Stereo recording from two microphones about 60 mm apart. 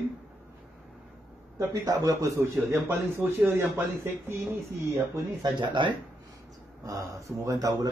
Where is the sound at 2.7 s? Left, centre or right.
Right.